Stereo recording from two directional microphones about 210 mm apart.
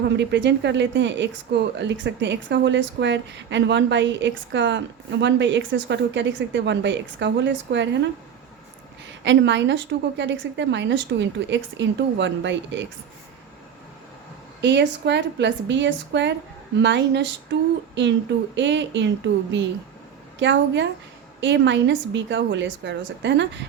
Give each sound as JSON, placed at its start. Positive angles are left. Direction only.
{"t": 0.2, "sound": "speech", "side_deg": -55}
{"t": 9.2, "sound": "speech", "side_deg": -60}
{"t": 14.6, "sound": "speech", "side_deg": -55}